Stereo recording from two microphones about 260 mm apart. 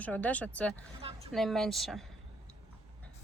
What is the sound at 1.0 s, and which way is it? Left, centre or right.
Speech, right.